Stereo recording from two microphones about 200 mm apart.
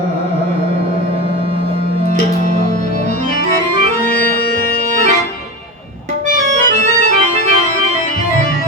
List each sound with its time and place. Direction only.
6.5 s accordion: 35° right (ahead or behind)